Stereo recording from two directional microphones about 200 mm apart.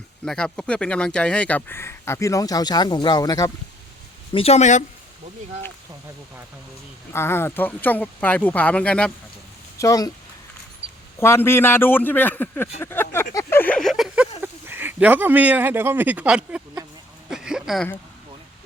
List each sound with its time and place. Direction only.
0.3 s speech: 5° left (ahead or behind); by 3.5 s 20° left (ahead or behind)
4.3 s speech: 30° left (ahead or behind)
7.1 s speech: 10° left (ahead or behind)
9.7 s speech: 15° left (ahead or behind)
10.8 s a sound: 30° right (ahead or behind)
11.2 s speech: 10° left (ahead or behind); by 16.8 s 5° right (ahead or behind)
17.2 s a sound: 5° right (ahead or behind)